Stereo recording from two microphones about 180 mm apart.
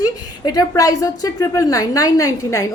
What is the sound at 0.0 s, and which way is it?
A woman's voice, 20° left (ahead or behind).